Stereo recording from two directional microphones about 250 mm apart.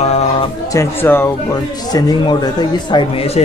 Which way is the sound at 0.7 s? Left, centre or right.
Centre.